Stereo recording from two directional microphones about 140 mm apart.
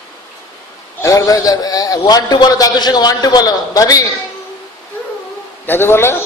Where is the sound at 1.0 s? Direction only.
25° left (ahead or behind).